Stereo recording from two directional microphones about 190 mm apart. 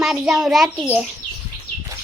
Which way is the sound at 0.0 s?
Centre (ahead or behind).